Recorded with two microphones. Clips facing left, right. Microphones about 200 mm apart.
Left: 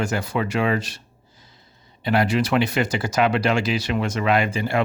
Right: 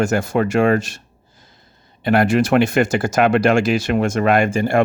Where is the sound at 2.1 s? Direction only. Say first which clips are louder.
Right 5 dB; 50° right (ahead or behind).